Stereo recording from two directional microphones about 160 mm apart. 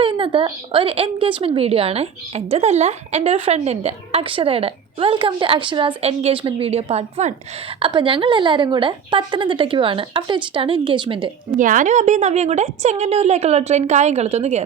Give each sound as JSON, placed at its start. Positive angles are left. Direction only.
{"t": 0.0, "sound": "a woman's voice", "side_deg": -30}
{"t": 7.8, "sound": "a woman's voice", "side_deg": -30}
{"t": 11.5, "sound": "a woman's voice", "side_deg": -55}